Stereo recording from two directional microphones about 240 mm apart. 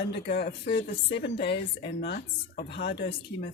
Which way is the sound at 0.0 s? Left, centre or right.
Left.